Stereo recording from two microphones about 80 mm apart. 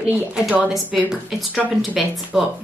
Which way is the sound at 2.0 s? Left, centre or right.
Centre.